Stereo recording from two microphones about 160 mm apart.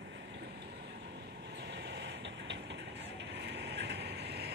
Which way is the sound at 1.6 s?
90° right.